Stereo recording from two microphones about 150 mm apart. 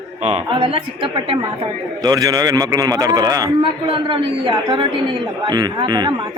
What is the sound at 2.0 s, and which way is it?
A man's voice, 25° right (ahead or behind).